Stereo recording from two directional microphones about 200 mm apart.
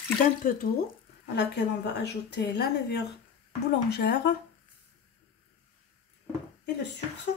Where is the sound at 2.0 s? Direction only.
55° left (ahead or behind).